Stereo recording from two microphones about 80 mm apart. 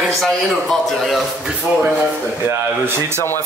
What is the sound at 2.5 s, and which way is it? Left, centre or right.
Speech, right.